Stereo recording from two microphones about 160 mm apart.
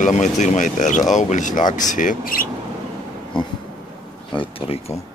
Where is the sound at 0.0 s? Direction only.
50° left (ahead or behind).